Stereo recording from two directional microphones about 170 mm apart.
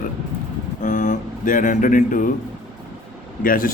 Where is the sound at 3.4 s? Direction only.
55° left (ahead or behind).